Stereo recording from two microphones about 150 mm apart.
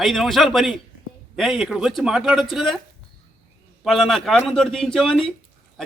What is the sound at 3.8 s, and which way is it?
A man's voice, centre (ahead or behind).